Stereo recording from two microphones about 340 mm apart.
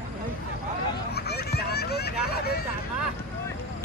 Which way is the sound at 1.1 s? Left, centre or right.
Left.